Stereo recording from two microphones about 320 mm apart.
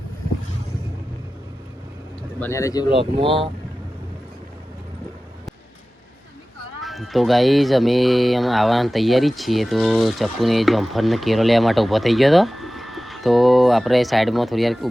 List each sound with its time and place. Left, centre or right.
2.4 s speech: centre
3.0 s speech: centre
6.8 s speech: centre